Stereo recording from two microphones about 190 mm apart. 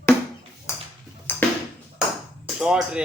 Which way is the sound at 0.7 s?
15° left (ahead or behind).